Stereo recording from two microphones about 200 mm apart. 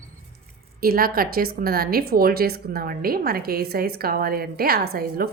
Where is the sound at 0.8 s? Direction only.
50° right (ahead or behind).